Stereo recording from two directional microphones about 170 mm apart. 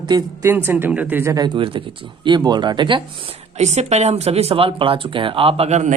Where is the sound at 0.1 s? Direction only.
25° right (ahead or behind).